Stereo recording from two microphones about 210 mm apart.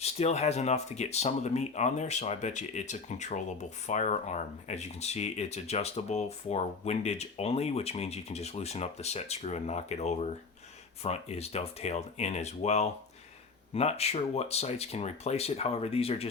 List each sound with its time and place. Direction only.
0.0 s speech: 30° left (ahead or behind)